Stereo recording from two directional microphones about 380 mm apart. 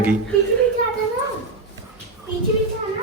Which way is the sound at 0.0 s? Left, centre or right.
Centre.